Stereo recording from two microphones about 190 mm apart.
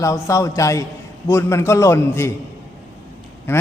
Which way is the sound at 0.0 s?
15° left (ahead or behind).